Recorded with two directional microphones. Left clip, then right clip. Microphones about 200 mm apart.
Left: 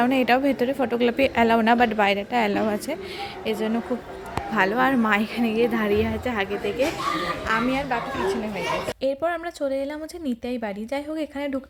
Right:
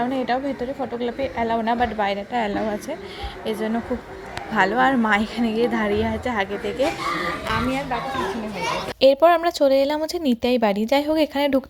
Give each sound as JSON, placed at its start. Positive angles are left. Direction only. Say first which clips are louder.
{"t": 0.0, "sound": "a woman's voice", "louder": "left 3 dB", "side_deg": 30}
{"t": 3.4, "sound": "a woman's voice", "louder": "right 1 dB", "side_deg": 5}
{"t": 7.7, "sound": "speech", "louder": "even", "side_deg": 15}
{"t": 9.0, "sound": "speech", "louder": "right 10 dB", "side_deg": -25}